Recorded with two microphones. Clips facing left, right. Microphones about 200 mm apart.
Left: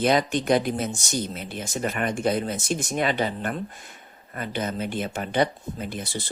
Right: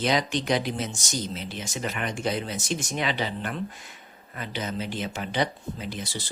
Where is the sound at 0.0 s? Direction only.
50° left (ahead or behind).